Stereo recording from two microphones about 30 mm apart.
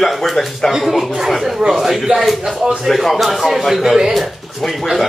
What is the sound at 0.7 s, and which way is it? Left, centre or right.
A man's voice, centre.